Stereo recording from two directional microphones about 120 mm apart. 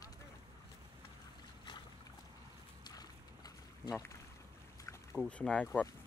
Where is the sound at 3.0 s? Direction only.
30° left (ahead or behind).